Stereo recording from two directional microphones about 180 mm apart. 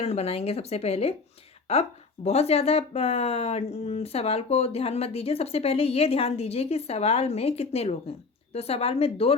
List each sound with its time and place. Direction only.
0.0 s speech: 35° left (ahead or behind)